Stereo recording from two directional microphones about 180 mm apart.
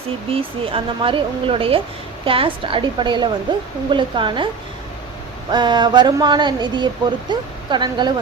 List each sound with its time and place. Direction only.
0.3 s speech: 30° right (ahead or behind)
5.5 s speech: 25° right (ahead or behind)